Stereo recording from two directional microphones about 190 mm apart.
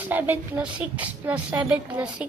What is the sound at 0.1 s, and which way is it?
A woman's voice, 10° right (ahead or behind).